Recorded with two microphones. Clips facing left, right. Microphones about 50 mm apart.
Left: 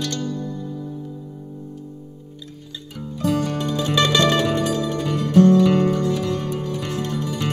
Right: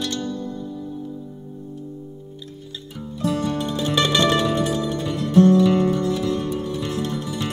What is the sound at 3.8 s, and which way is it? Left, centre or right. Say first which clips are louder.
Music: left 2 dB; right.